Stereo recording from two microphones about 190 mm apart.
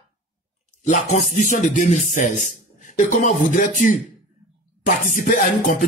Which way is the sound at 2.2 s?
45° left (ahead or behind).